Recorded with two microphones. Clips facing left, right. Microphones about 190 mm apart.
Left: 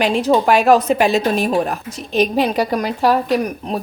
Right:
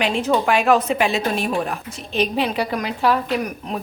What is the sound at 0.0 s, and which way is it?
Speech, 40° left (ahead or behind).